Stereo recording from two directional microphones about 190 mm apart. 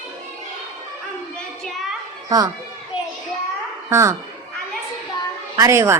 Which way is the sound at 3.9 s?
15° right (ahead or behind).